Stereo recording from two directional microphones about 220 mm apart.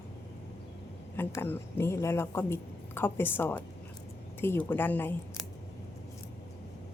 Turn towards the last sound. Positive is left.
turn(degrees=10)  # may be behind; listen again after turning